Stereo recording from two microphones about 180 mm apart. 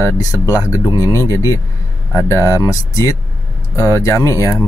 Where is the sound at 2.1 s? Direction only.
15° left (ahead or behind).